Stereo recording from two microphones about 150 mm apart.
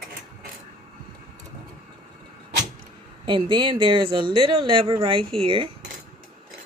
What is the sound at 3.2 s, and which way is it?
Speech, 35° right (ahead or behind).